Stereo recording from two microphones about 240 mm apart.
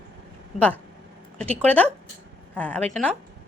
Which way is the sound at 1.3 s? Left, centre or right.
Centre.